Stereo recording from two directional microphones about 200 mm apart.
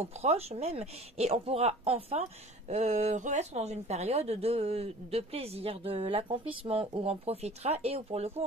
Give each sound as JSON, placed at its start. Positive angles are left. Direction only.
{"t": 0.0, "sound": "speech", "side_deg": -30}